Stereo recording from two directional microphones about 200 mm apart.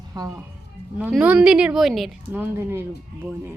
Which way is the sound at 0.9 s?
5° right (ahead or behind).